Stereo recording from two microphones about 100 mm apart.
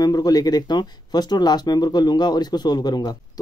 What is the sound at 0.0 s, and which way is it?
Speech, 40° left (ahead or behind).